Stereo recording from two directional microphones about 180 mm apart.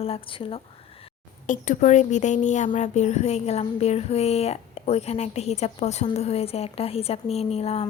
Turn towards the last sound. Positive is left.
turn(degrees=35)  # may be behind; listen again after turning